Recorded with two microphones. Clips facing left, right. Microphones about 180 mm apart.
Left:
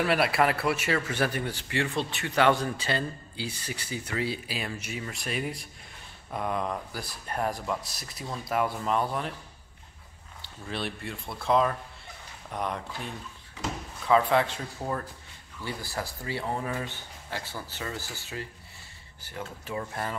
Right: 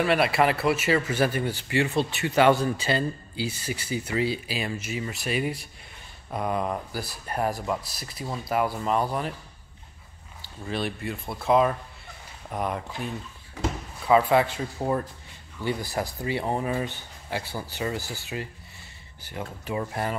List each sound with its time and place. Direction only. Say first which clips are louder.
0.0 s a man's voice: right 3 dB; centre (ahead or behind)
10.4 s a man's voice: right 4 dB; centre (ahead or behind)
14.0 s speech: right 3 dB; 10° right (ahead or behind)
14.8 s speech: right 6 dB; 20° right (ahead or behind)